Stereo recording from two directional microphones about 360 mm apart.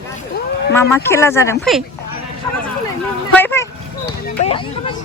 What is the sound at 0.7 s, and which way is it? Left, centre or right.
Speech, centre.